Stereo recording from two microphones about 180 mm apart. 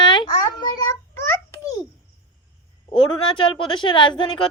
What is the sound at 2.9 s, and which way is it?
A woman's voice, 30° left (ahead or behind).